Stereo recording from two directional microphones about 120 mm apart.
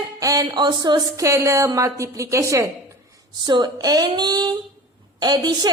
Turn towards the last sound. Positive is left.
turn(degrees=-35)  # may be behind; listen again after turning